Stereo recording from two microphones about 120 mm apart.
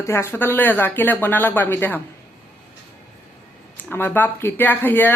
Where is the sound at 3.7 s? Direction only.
15° left (ahead or behind).